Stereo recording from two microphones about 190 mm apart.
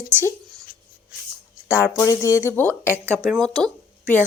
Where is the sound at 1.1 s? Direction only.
55° left (ahead or behind).